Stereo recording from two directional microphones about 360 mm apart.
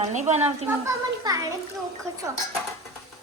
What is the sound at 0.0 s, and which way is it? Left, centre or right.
A child's voice, centre.